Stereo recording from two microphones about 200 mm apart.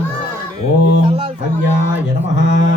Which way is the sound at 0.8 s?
65° left (ahead or behind).